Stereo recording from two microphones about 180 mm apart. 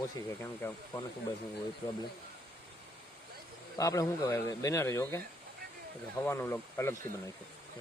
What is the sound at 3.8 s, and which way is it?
Speech, 20° left (ahead or behind).